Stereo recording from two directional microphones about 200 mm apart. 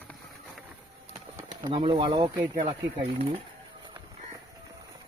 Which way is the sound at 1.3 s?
20° right (ahead or behind).